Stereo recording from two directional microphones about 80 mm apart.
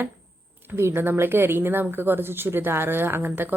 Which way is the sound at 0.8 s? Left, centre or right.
Right.